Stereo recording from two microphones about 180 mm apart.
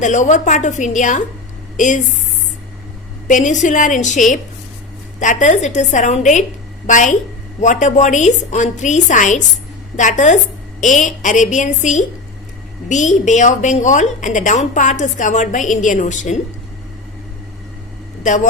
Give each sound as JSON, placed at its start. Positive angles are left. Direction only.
{"t": 0.0, "sound": "a woman's voice", "side_deg": 45}
{"t": 3.2, "sound": "a woman's voice", "side_deg": 45}
{"t": 18.2, "sound": "speech", "side_deg": 45}